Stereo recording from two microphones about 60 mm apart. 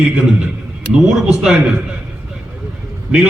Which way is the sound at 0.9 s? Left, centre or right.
Centre.